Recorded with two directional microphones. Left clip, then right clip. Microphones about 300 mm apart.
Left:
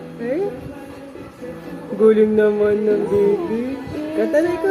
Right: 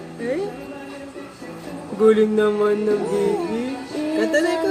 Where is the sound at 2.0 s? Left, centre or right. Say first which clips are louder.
Left 2 dB; right.